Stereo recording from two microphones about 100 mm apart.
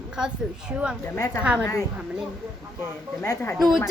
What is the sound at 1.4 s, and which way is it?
Speech, 10° right (ahead or behind).